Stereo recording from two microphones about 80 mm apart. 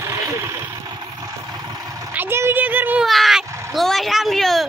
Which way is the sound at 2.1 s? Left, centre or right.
Right.